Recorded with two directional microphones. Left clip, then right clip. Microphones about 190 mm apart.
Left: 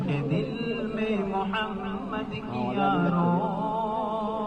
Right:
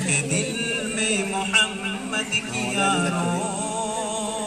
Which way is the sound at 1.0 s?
25° right (ahead or behind).